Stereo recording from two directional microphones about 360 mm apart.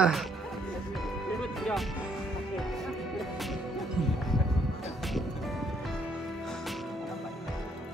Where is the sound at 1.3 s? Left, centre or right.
Centre.